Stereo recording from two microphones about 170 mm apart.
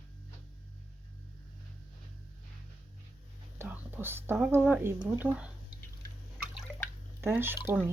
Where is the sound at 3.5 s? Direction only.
10° right (ahead or behind).